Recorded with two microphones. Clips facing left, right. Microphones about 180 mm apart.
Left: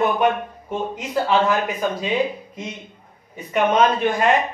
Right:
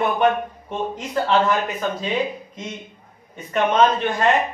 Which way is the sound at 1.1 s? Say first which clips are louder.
Even; 10° left (ahead or behind).